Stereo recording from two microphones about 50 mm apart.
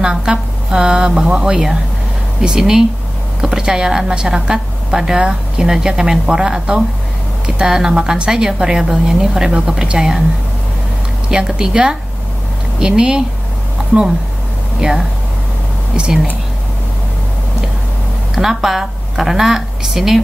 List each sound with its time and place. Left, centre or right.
0.0 s a woman's voice: centre
11.2 s a woman's voice: centre
14.8 s a woman's voice: centre
18.3 s speech: centre